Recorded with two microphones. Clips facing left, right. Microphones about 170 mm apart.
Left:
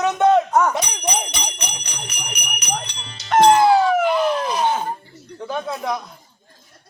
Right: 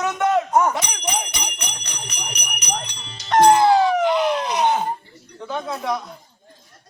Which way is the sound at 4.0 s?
20° right (ahead or behind).